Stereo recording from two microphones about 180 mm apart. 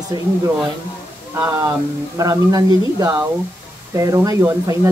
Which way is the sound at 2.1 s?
20° right (ahead or behind).